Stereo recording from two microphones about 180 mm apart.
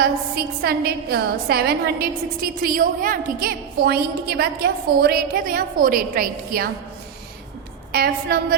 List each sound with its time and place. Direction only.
0.0 s a woman's voice: 60° right (ahead or behind)
7.9 s a woman's voice: 55° right (ahead or behind)